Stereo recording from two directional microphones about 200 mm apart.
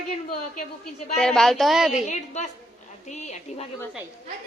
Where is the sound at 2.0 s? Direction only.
35° left (ahead or behind).